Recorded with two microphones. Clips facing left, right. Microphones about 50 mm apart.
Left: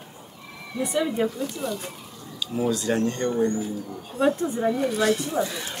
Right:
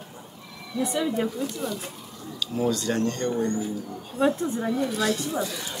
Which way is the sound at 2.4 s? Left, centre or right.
Centre.